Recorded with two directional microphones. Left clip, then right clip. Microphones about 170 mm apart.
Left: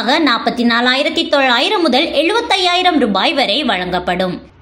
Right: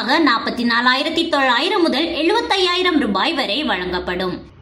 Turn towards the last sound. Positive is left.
turn(degrees=25)  # may be behind; listen again after turning